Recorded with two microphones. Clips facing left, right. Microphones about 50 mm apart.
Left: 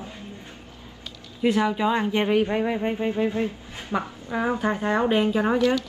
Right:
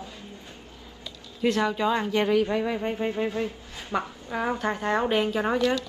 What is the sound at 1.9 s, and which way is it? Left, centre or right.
Speech, left.